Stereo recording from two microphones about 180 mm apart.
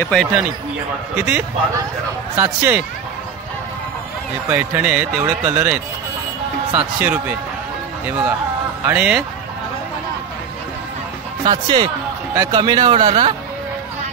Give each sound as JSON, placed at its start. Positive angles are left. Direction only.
{"t": 0.0, "sound": "speech", "side_deg": 5}
{"t": 4.5, "sound": "speech", "side_deg": -10}
{"t": 8.8, "sound": "speech", "side_deg": -5}
{"t": 11.4, "sound": "a man's voice", "side_deg": -25}